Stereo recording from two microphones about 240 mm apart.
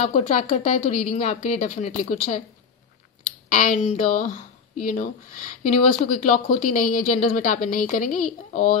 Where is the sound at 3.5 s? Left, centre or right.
Left.